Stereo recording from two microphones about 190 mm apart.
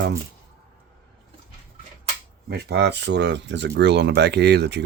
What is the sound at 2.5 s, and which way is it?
Speech, 60° right (ahead or behind).